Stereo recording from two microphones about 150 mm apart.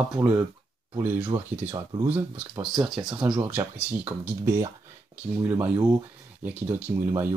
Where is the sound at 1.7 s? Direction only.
30° right (ahead or behind).